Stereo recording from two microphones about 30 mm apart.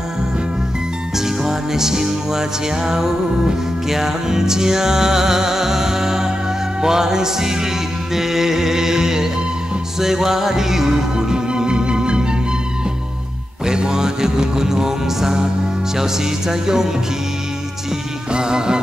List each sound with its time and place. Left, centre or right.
1.1 s music: centre; by 12.3 s right
13.7 s music: right
18.3 s music: right